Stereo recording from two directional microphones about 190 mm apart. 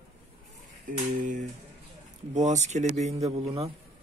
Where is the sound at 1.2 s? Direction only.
45° right (ahead or behind).